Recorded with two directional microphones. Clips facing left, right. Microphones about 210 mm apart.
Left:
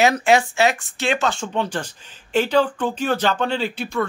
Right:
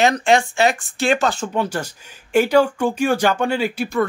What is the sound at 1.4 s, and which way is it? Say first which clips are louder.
Speech: right 2 dB; 10° right (ahead or behind).